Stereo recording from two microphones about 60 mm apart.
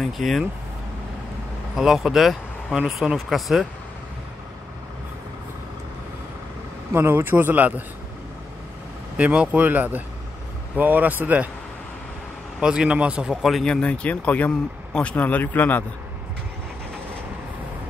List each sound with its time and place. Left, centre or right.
0.0 s speech: centre
1.8 s speech: centre
6.9 s speech: right
9.1 s speech: right
12.5 s speech: centre
13.4 s speech: centre
13.7 s speech: centre
15.1 s speech: left